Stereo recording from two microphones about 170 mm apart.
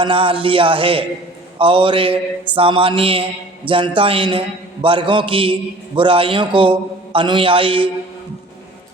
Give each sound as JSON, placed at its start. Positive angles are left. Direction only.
{"t": 0.0, "sound": "a man's voice", "side_deg": -30}